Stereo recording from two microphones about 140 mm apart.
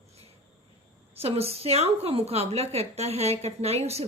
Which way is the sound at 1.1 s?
45° right (ahead or behind).